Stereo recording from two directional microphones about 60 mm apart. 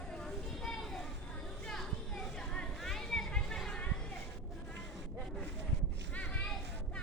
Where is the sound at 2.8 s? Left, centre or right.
Centre.